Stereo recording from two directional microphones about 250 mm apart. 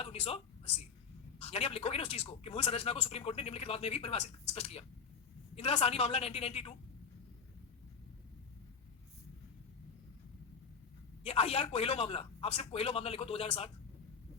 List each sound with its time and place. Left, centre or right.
0.0 s a sound: left
1.4 s speech: left
11.2 s speech: left